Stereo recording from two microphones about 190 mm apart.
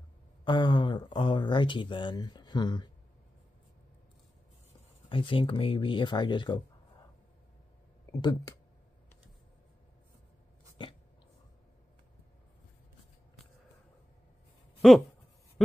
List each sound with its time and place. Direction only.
0.5 s speech: 25° left (ahead or behind)
5.1 s speech: 25° left (ahead or behind)
8.2 s speech: 20° left (ahead or behind)
10.8 s dog: 25° left (ahead or behind)
14.8 s speech: centre (ahead or behind)